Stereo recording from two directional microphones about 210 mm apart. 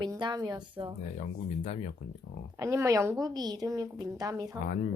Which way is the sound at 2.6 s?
15° right (ahead or behind).